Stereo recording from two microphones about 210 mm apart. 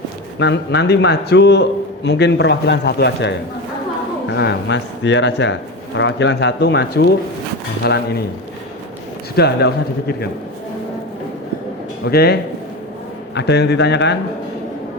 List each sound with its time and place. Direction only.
0.3 s speech: 55° left (ahead or behind)
9.3 s speech: 50° left (ahead or behind)
12.0 s speech: 50° left (ahead or behind)